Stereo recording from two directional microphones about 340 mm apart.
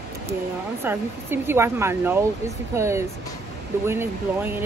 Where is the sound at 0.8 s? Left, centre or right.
Centre.